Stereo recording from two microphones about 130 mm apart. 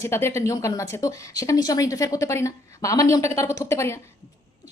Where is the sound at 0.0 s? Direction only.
20° left (ahead or behind).